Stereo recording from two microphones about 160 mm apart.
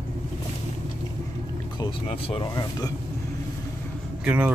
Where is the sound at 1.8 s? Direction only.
35° left (ahead or behind).